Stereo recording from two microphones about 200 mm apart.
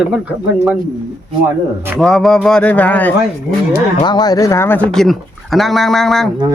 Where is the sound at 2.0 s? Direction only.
Centre (ahead or behind).